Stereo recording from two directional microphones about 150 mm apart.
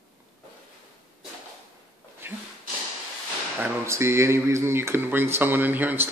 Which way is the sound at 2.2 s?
15° right (ahead or behind).